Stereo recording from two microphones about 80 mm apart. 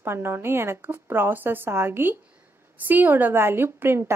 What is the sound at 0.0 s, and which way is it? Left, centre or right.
A woman's voice, right.